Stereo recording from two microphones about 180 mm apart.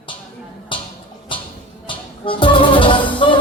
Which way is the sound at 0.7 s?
30° left (ahead or behind).